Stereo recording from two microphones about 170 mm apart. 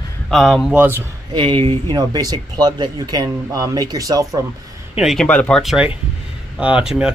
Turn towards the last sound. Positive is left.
turn(degrees=-5)  # may be behind; listen again after turning